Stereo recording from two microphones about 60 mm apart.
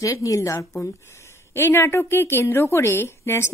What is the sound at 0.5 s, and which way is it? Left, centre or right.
A woman's voice, left.